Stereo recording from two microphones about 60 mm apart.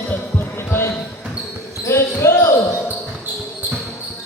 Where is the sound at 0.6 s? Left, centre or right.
Left.